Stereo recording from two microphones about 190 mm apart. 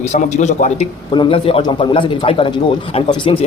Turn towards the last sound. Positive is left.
turn(degrees=25)  # may be behind; listen again after turning